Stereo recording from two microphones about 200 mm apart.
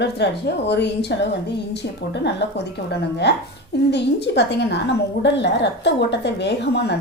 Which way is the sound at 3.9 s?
60° left (ahead or behind).